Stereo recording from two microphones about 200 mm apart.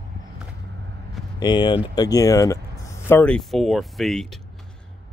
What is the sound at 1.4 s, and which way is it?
Speech, 20° left (ahead or behind).